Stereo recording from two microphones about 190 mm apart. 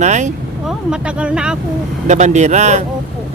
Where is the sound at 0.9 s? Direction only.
5° right (ahead or behind).